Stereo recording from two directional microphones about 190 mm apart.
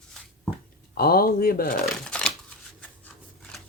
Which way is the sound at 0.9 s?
50° left (ahead or behind).